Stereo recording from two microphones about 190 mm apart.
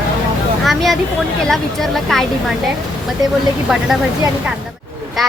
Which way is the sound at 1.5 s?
Centre (ahead or behind).